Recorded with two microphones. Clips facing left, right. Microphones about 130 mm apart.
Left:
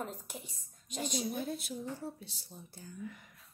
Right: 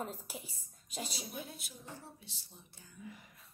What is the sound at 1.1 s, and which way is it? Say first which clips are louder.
A woman's voice: left 9 dB; 45° left (ahead or behind).